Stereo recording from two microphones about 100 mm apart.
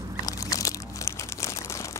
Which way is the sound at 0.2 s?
35° left (ahead or behind).